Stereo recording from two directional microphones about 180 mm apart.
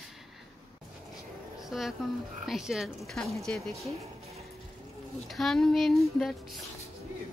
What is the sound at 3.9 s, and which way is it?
Music, 35° right (ahead or behind).